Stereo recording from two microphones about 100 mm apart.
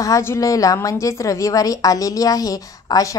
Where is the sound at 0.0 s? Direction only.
30° left (ahead or behind).